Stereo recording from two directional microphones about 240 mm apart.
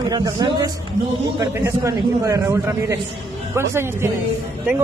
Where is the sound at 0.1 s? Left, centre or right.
Centre.